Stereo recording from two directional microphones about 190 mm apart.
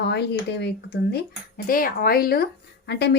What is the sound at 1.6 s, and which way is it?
Speech, 50° left (ahead or behind).